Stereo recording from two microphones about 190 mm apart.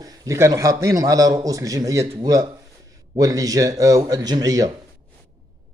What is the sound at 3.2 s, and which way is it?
A man's voice, 20° right (ahead or behind).